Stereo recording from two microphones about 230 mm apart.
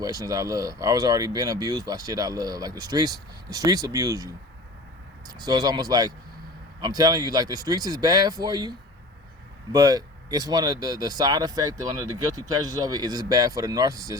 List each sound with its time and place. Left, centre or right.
0.0 s speech: centre
5.3 s speech: centre
9.7 s speech: centre